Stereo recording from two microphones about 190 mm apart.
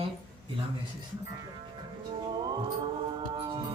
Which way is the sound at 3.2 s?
25° right (ahead or behind).